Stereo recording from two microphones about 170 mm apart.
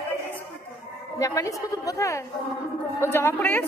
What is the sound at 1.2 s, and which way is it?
A woman's voice, 20° left (ahead or behind).